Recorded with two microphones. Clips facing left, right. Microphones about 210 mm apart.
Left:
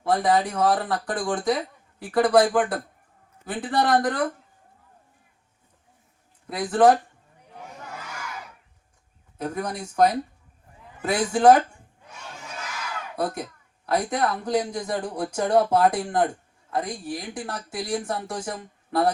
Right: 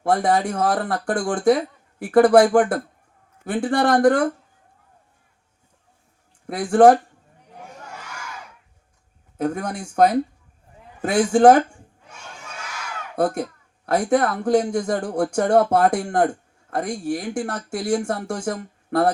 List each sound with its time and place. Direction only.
0.0 s speech: 50° right (ahead or behind)
6.5 s speech: 50° right (ahead or behind)
9.4 s speech: 50° right (ahead or behind)
13.1 s speech: 50° right (ahead or behind)